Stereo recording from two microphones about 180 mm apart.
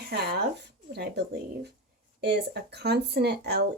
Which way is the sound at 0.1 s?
65° right (ahead or behind).